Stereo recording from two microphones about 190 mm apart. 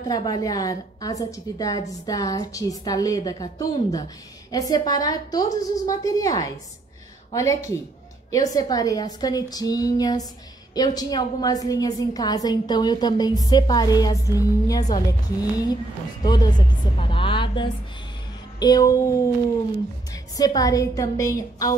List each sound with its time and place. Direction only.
0.1 s a woman's voice: 20° left (ahead or behind)
20.3 s a woman's voice: 20° left (ahead or behind)